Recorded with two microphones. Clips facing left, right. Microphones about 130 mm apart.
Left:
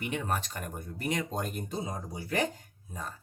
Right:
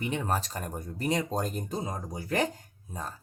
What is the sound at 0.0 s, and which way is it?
Speech, 35° right (ahead or behind).